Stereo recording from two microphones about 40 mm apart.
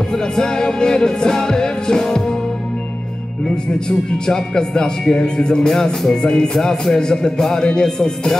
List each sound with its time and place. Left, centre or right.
0.1 s music: centre
4.3 s speech: centre
6.6 s music: centre